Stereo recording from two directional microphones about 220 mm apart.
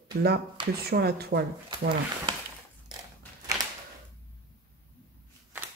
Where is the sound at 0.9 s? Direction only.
45° right (ahead or behind).